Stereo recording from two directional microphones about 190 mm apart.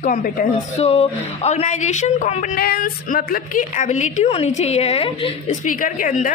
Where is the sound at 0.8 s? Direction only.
35° left (ahead or behind).